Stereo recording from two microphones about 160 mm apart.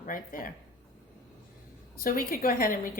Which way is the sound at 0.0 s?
60° left (ahead or behind).